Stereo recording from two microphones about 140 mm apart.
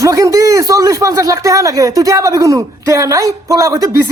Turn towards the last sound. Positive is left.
turn(degrees=-25)  # may be behind; listen again after turning